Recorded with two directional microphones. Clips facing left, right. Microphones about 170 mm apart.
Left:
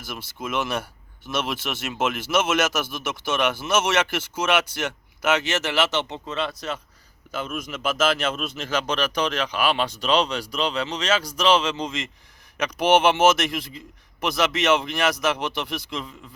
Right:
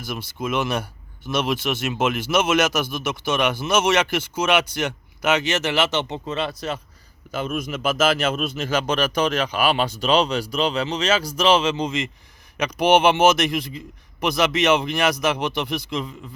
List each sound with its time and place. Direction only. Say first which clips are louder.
0.3 s a man's voice: right 3 dB; 15° right (ahead or behind)
3.6 s speech: right 3 dB; 5° left (ahead or behind)
7.3 s a man's voice: right 4 dB; 40° right (ahead or behind)
7.6 s a man's voice: right 2 dB; 10° right (ahead or behind)